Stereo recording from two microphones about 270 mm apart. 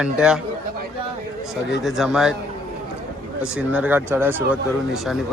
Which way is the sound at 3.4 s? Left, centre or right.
Centre.